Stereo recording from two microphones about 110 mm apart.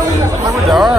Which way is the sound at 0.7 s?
Centre (ahead or behind).